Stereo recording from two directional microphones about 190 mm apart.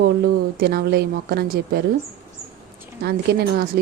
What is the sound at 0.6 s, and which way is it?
A woman's voice, 55° right (ahead or behind).